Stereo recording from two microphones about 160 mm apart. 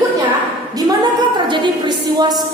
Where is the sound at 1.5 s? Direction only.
30° right (ahead or behind).